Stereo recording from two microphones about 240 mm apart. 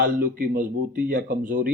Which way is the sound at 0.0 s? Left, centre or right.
Right.